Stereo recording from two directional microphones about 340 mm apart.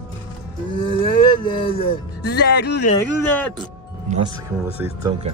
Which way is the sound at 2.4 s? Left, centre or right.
Left.